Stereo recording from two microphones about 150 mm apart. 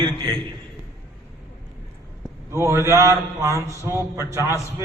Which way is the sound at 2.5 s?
20° right (ahead or behind).